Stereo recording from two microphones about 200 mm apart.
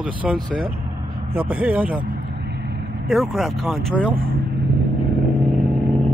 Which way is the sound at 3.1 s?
Centre (ahead or behind).